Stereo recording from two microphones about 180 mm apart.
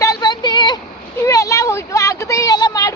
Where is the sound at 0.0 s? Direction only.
20° left (ahead or behind).